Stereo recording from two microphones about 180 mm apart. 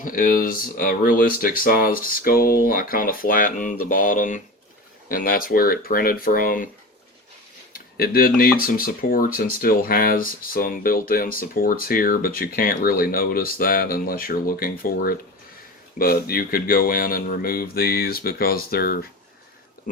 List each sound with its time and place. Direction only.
0.0 s speech: 50° left (ahead or behind)
7.7 s speech: 55° left (ahead or behind)